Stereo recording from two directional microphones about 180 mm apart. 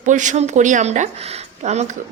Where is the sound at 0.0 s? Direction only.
45° right (ahead or behind).